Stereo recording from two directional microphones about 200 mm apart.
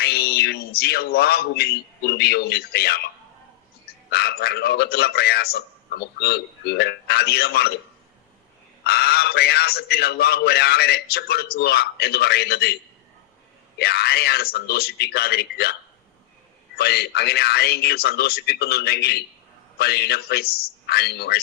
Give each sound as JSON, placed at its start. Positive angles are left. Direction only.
{"t": 0.0, "sound": "speech", "side_deg": 50}
{"t": 4.1, "sound": "a man's voice", "side_deg": 50}
{"t": 8.8, "sound": "a man's voice", "side_deg": 50}
{"t": 13.7, "sound": "a man's voice", "side_deg": 55}
{"t": 16.7, "sound": "a man's voice", "side_deg": 55}